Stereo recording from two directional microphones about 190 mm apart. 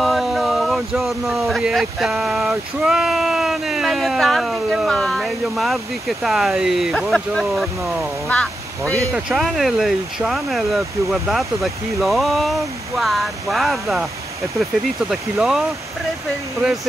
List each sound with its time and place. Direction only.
0.0 s speech: centre (ahead or behind)
8.9 s speech: 15° right (ahead or behind)
9.3 s speech: centre (ahead or behind)
15.0 s speech: centre (ahead or behind)